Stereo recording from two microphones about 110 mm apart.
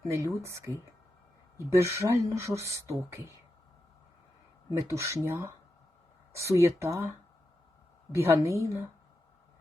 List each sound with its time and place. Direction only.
0.0 s speech: 25° right (ahead or behind)
4.8 s speech: 25° right (ahead or behind)
8.1 s speech: 25° right (ahead or behind)